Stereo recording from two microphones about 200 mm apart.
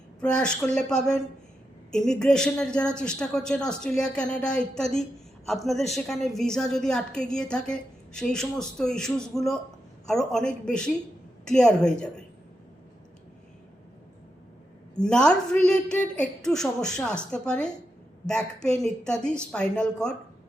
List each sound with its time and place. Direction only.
0.2 s a woman's voice: 5° left (ahead or behind)
14.9 s a woman's voice: 5° left (ahead or behind)